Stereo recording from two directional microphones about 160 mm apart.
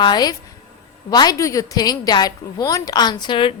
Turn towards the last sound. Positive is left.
turn(degrees=30)  # may be behind; listen again after turning